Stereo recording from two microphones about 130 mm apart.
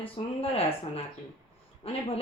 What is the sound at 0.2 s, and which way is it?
Speech, 50° left (ahead or behind).